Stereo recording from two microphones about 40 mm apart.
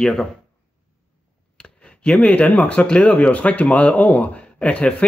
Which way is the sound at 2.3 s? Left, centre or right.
Left.